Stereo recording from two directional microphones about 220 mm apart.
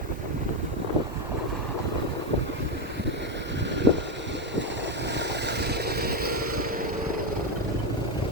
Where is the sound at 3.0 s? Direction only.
55° right (ahead or behind).